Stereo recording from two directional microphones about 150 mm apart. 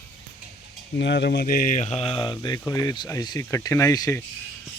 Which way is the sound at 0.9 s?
90° left.